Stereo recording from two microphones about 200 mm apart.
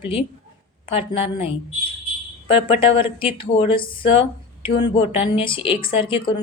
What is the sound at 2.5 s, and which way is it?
Speech, 25° left (ahead or behind).